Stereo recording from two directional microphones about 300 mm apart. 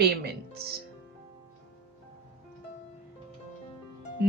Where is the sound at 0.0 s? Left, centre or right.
Right.